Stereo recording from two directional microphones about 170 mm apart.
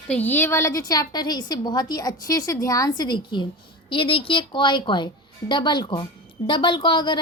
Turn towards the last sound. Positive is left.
turn(degrees=25)  # may be behind; listen again after turning